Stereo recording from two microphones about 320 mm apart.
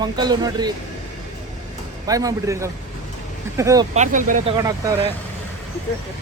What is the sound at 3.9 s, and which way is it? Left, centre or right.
Speech, right.